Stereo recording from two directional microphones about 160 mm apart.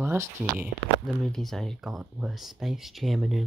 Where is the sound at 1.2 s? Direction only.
Centre (ahead or behind).